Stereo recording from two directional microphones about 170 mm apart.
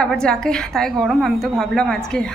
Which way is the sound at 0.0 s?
5° left (ahead or behind).